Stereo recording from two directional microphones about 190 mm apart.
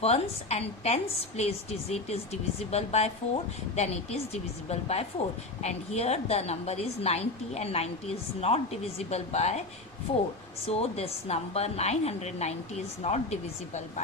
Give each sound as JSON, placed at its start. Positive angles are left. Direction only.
{"t": 0.0, "sound": "a woman's voice", "side_deg": 35}
{"t": 10.7, "sound": "a woman's voice", "side_deg": 35}